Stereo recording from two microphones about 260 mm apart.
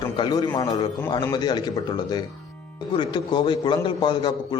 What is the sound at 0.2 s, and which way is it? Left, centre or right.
A man's voice, centre.